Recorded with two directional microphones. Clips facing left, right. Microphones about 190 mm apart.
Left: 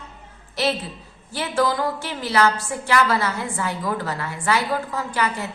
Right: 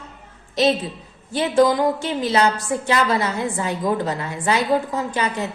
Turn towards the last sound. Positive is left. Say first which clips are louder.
# right 2 dB
turn(degrees=-20)  # may be behind; listen again after turning